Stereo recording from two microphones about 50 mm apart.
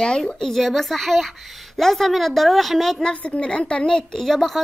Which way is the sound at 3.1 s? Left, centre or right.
Left.